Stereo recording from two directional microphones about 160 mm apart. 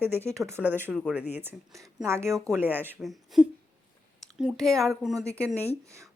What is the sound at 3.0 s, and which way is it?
Speech, centre (ahead or behind).